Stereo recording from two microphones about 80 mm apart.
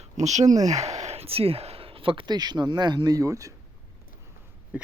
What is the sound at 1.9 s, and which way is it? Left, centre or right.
Speech, right.